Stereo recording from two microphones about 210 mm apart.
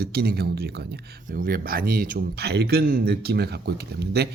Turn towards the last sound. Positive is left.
turn(degrees=-50)  # may be behind; listen again after turning